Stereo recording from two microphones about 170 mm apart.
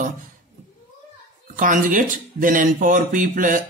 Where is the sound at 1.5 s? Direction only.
50° right (ahead or behind).